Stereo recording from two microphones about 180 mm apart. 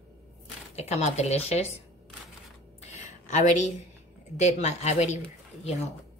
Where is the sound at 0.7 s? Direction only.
40° left (ahead or behind).